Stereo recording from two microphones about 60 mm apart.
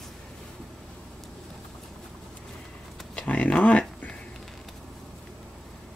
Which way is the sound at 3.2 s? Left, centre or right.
Left.